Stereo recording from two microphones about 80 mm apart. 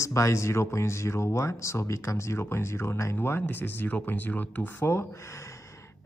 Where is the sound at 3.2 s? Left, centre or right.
Left.